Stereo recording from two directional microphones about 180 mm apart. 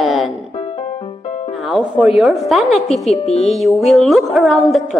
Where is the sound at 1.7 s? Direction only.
5° right (ahead or behind).